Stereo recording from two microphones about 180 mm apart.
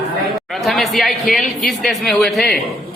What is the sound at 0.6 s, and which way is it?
Speech, centre (ahead or behind).